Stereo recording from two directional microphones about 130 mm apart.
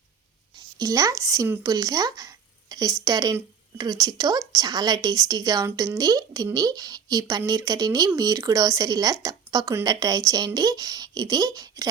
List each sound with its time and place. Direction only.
0.8 s speech: 25° right (ahead or behind)